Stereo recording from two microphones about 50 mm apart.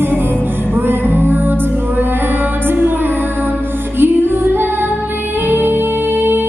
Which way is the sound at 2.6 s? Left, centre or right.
Right.